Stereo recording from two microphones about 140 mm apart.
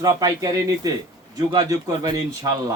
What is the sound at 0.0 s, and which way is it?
Speech, 25° right (ahead or behind).